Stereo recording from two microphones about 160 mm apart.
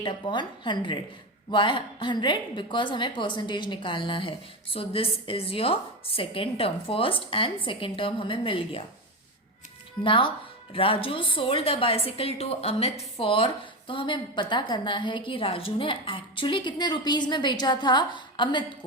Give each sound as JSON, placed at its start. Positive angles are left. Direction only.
{"t": 0.0, "sound": "a woman's voice", "side_deg": 30}
{"t": 10.0, "sound": "a woman's voice", "side_deg": 30}